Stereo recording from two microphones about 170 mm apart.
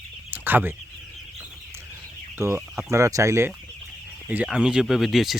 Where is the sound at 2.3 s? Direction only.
15° right (ahead or behind).